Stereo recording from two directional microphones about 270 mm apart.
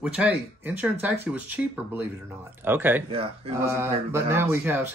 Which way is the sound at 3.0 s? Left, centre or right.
Centre.